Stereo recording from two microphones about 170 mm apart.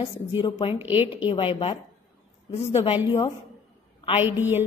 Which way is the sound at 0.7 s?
10° right (ahead or behind).